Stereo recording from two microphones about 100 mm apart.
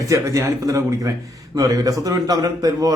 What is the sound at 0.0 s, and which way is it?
Speech, 30° right (ahead or behind).